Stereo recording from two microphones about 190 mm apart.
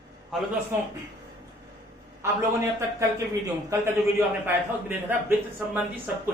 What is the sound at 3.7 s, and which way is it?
Speech, 15° right (ahead or behind).